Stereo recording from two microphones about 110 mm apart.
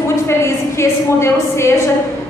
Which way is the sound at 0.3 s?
25° left (ahead or behind).